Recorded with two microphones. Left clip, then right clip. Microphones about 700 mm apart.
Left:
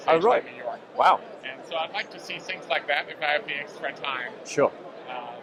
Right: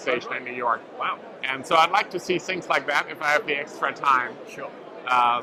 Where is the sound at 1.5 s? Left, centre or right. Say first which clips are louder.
Right 11 dB; right.